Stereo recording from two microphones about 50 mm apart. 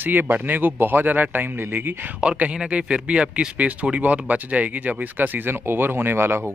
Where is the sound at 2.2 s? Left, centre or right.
Right.